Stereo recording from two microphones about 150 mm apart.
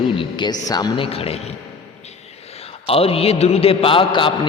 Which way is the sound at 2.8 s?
40° left (ahead or behind).